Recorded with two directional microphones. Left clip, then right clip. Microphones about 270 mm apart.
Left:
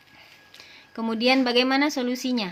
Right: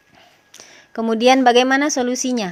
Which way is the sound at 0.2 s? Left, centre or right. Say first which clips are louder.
Right 4 dB; right.